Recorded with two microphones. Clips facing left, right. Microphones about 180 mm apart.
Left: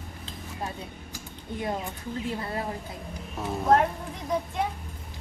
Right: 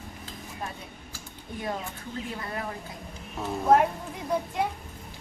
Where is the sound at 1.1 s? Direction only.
25° left (ahead or behind).